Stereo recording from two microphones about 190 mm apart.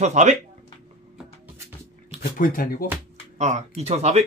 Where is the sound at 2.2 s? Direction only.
45° left (ahead or behind).